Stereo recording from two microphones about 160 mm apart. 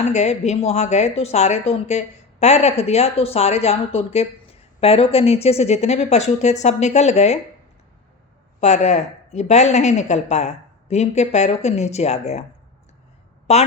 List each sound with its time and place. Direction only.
0.0 s speech: 45° left (ahead or behind)
8.6 s speech: 45° left (ahead or behind)
13.5 s speech: 40° left (ahead or behind)